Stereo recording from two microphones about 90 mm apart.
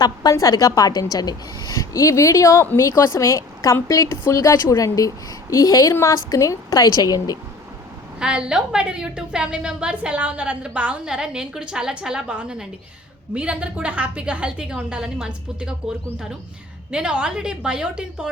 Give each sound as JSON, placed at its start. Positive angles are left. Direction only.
{"t": 0.0, "sound": "a woman's voice", "side_deg": 45}
{"t": 8.2, "sound": "a woman's voice", "side_deg": -10}
{"t": 16.9, "sound": "a woman's voice", "side_deg": -10}